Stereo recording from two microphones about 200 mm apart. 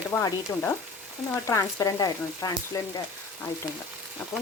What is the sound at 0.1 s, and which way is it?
Frying, 10° left (ahead or behind).